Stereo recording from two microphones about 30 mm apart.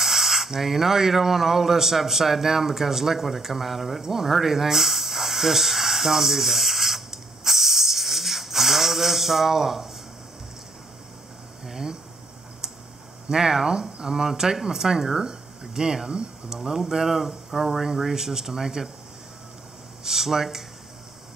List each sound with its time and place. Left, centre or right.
0.0 s speech: centre
4.0 s a sound: centre
11.6 s speech: centre
13.3 s speech: centre
16.4 s speech: centre
18.1 s speech: centre
20.0 s a sound: centre